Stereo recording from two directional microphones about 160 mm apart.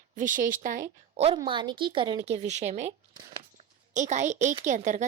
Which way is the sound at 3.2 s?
25° right (ahead or behind).